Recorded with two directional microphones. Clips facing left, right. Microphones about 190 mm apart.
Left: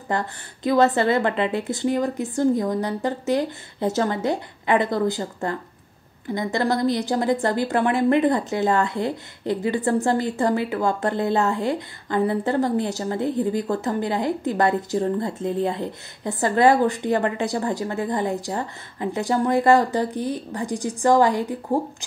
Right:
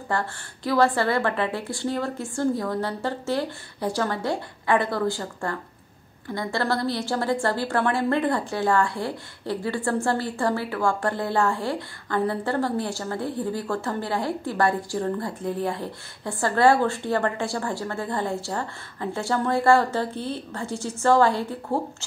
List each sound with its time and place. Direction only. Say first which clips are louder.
0.1 s a woman's voice: left 2 dB; 20° left (ahead or behind)